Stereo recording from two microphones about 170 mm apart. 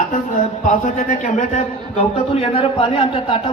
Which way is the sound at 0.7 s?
45° left (ahead or behind).